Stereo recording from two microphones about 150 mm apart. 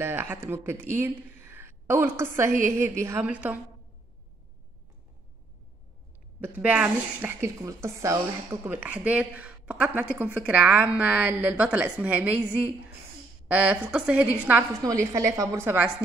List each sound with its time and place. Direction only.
0.0 s a woman's voice: 15° right (ahead or behind)
6.4 s speech: 10° right (ahead or behind)
14.8 s a woman's voice: 20° right (ahead or behind)